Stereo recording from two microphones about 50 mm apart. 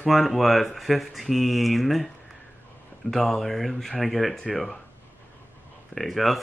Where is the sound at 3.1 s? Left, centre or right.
Centre.